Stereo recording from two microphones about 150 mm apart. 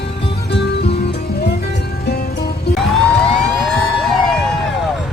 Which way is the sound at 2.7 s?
Centre (ahead or behind).